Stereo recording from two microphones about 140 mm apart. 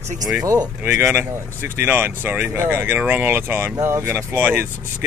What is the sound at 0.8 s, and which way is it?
Speech, 15° right (ahead or behind).